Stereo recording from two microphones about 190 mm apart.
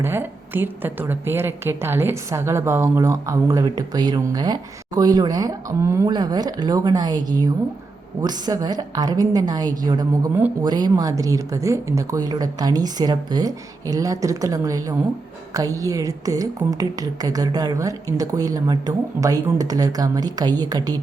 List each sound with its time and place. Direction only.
0.0 s a woman's voice: 10° right (ahead or behind)